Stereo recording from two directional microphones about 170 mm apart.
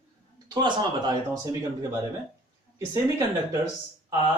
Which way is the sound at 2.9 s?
20° right (ahead or behind).